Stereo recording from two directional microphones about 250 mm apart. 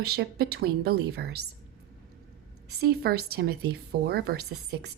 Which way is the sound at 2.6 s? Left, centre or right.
Right.